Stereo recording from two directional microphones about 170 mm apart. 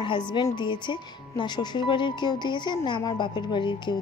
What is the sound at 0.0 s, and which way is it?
A woman's voice, 30° left (ahead or behind).